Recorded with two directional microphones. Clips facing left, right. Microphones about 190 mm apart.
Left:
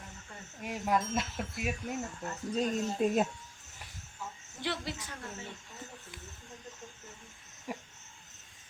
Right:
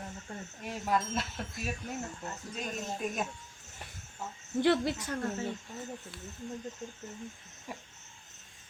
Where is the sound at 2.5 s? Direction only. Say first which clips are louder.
Left 8 dB; 30° left (ahead or behind).